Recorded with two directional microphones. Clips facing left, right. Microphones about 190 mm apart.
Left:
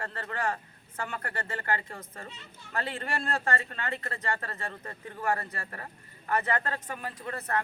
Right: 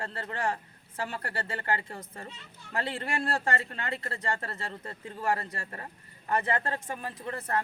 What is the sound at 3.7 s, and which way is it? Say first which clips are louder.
Speech: even; 25° right (ahead or behind).